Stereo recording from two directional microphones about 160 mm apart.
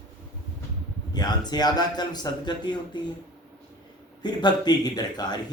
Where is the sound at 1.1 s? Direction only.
25° left (ahead or behind).